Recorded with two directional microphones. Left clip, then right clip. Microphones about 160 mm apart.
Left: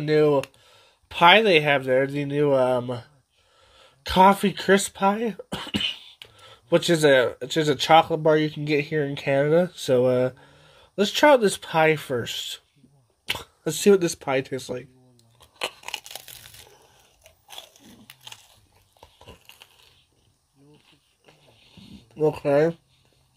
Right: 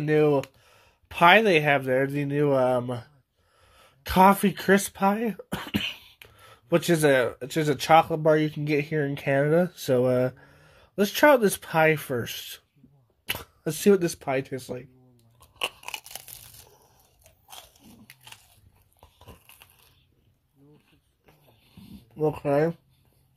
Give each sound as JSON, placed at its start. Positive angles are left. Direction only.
{"t": 0.0, "sound": "speech", "side_deg": -10}
{"t": 5.5, "sound": "cough", "side_deg": -20}
{"t": 6.3, "sound": "speech", "side_deg": -5}
{"t": 15.3, "sound": "crunch", "side_deg": 15}
{"t": 16.7, "sound": "biting", "side_deg": 20}
{"t": 18.9, "sound": "biting", "side_deg": 5}
{"t": 21.3, "sound": "a sound", "side_deg": 5}